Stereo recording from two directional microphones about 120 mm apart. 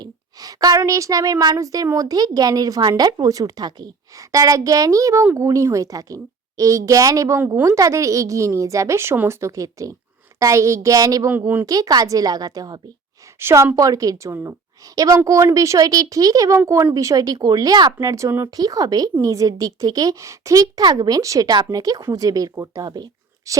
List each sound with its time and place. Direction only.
0.0 s a woman's voice: 30° right (ahead or behind)
11.3 s speech: 15° right (ahead or behind)
11.6 s a woman's voice: 30° right (ahead or behind)
13.4 s a woman's voice: 20° right (ahead or behind)